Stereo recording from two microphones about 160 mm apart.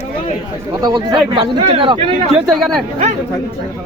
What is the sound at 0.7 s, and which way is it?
Speech, 25° right (ahead or behind).